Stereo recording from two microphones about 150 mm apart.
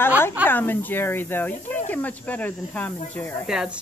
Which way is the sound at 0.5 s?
15° left (ahead or behind).